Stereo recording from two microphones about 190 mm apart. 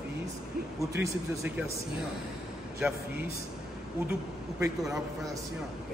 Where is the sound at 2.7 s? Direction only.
5° right (ahead or behind).